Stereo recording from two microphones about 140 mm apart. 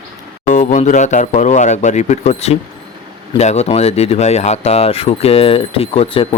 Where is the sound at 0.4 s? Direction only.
60° left (ahead or behind).